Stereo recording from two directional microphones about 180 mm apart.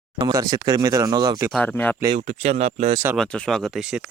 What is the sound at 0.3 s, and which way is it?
Speech, 20° right (ahead or behind).